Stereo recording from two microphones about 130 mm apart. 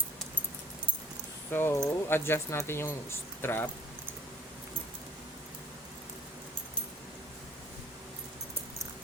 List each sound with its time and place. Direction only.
1.5 s speech: 20° left (ahead or behind)